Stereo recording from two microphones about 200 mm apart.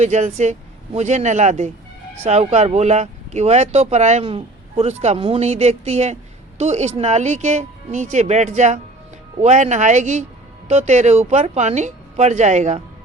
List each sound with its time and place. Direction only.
0.0 s speech: 35° right (ahead or behind)